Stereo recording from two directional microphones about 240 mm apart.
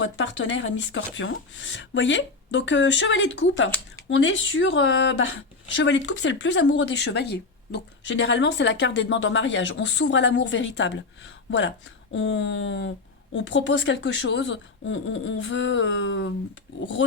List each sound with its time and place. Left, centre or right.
0.0 s speech: left
12.1 s speech: left